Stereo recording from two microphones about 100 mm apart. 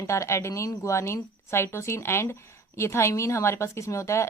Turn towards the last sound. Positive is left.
turn(degrees=30)  # may be behind; listen again after turning